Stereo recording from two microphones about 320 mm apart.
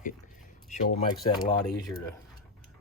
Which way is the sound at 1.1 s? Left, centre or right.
Centre.